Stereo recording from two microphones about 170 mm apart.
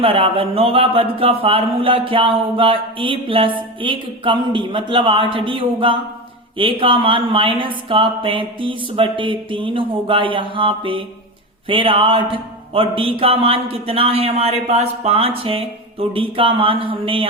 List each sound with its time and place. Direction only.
0.0 s a man's voice: 35° right (ahead or behind)